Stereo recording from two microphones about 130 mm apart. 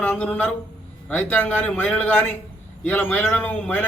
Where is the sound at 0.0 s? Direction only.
10° left (ahead or behind).